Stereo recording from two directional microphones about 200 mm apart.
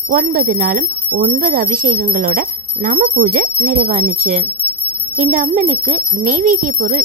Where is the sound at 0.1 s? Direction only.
45° right (ahead or behind).